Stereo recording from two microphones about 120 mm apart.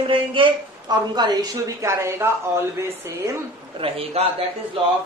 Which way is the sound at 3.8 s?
55° right (ahead or behind).